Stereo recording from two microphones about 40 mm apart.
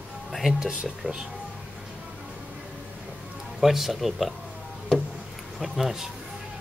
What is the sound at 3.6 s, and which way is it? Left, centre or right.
Speech, centre.